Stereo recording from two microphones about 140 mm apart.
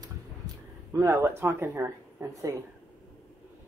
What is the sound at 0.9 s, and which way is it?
Speech, 20° right (ahead or behind).